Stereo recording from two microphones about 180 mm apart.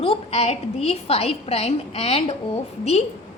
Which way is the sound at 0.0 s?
35° left (ahead or behind).